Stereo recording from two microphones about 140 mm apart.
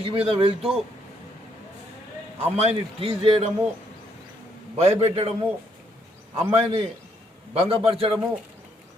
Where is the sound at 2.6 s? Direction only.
45° right (ahead or behind).